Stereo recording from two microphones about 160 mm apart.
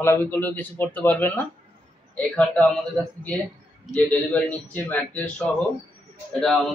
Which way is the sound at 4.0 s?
10° left (ahead or behind).